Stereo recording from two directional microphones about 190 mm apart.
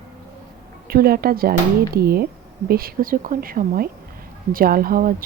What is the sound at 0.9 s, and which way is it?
Speech, 55° right (ahead or behind).